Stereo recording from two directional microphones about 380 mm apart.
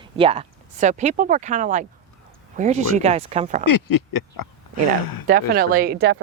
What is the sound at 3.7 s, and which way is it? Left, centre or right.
Speech, left.